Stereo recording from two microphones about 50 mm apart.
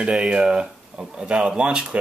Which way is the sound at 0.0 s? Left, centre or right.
Right.